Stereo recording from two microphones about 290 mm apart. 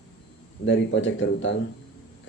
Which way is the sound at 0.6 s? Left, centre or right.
Left.